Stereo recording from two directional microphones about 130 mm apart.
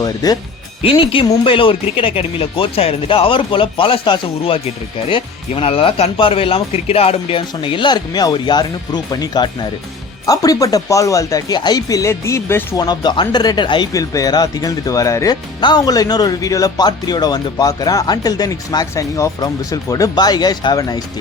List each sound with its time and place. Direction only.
0.0 s speech: 30° left (ahead or behind)
0.8 s speech: 45° left (ahead or behind); by 12.8 s 20° left (ahead or behind)
12.8 s speech: 30° left (ahead or behind)